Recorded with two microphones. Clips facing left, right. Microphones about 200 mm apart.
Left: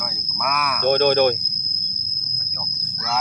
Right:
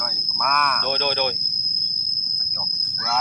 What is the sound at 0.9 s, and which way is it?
Speech, 50° left (ahead or behind).